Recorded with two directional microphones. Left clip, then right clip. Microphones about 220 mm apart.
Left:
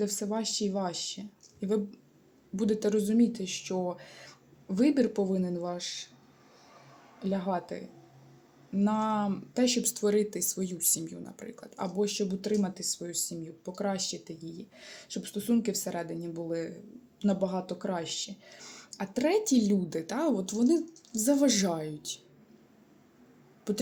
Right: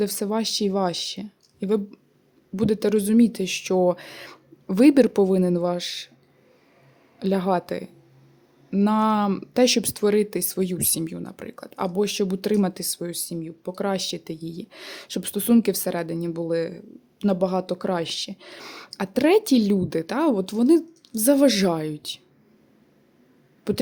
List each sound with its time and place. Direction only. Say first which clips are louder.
0.0 s speech: right 7 dB; 45° right (ahead or behind)
7.2 s speech: right 9 dB; 45° right (ahead or behind)
23.7 s speech: right 8 dB; 35° right (ahead or behind)